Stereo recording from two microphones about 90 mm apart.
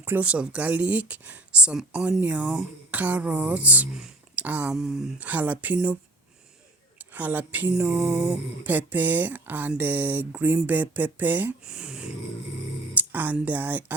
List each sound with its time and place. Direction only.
0.0 s speech: 20° right (ahead or behind)
4.7 s speech: 5° right (ahead or behind)
7.0 s speech: 20° right (ahead or behind)
8.0 s mantra: 35° right (ahead or behind)
8.3 s speech: 20° right (ahead or behind)
11.6 s speech: 10° right (ahead or behind)